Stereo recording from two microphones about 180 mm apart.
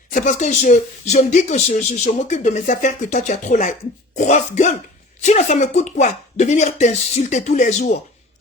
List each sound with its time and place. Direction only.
0.1 s speech: 45° left (ahead or behind)